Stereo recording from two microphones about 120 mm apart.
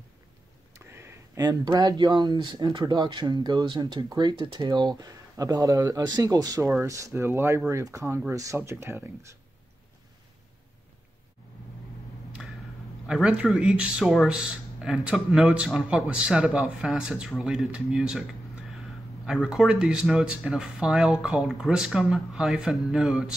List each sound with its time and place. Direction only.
0.7 s speech: 20° right (ahead or behind)
13.0 s speech: 5° right (ahead or behind)
19.2 s speech: 5° right (ahead or behind)